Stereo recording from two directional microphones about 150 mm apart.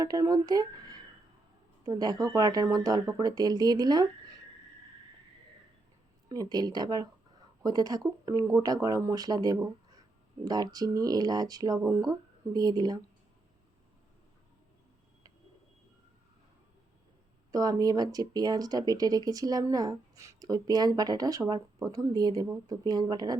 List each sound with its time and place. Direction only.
0.0 s speech: 25° right (ahead or behind)
6.2 s speech: 25° right (ahead or behind)
17.5 s speech: 25° right (ahead or behind)